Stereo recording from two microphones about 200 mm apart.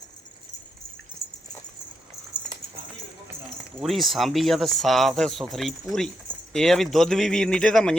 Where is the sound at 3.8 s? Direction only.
Centre (ahead or behind).